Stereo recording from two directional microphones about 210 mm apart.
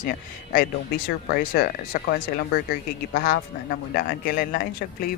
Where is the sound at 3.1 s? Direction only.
40° left (ahead or behind).